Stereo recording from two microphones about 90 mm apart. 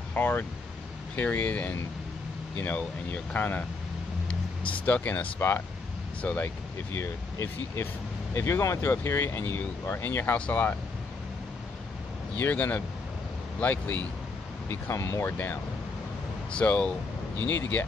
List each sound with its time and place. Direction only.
0.1 s speech: 20° left (ahead or behind)
4.8 s speech: 15° left (ahead or behind)
6.9 s speech: 30° left (ahead or behind)
12.4 s speech: 20° left (ahead or behind)
14.7 s speech: 30° left (ahead or behind)
15.3 s speech: 15° left (ahead or behind)